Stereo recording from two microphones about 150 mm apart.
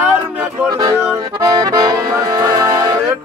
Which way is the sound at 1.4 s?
25° right (ahead or behind).